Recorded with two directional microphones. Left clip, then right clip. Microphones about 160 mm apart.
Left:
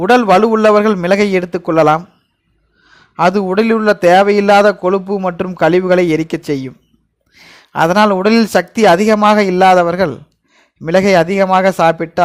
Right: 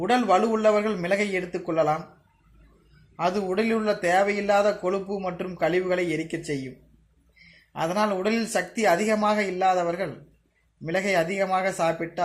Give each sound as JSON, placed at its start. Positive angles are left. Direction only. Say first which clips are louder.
{"t": 0.0, "sound": "a man's voice", "louder": "left 12 dB", "side_deg": 50}
{"t": 3.2, "sound": "a man's voice", "louder": "left 13 dB", "side_deg": 50}
{"t": 7.7, "sound": "a man's voice", "louder": "left 14 dB", "side_deg": 55}